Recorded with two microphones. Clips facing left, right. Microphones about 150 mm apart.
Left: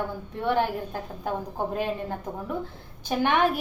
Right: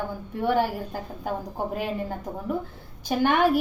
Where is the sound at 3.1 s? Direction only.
5° right (ahead or behind).